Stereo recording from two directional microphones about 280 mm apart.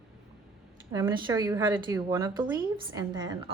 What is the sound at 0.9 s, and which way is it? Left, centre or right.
A woman's voice, centre.